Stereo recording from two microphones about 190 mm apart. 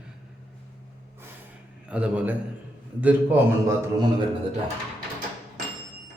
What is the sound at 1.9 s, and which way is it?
A man's voice, 5° right (ahead or behind).